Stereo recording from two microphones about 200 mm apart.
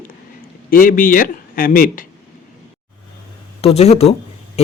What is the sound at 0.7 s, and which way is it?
A man's voice, 45° left (ahead or behind).